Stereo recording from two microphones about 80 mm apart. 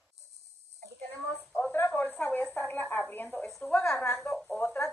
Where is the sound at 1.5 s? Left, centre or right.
Left.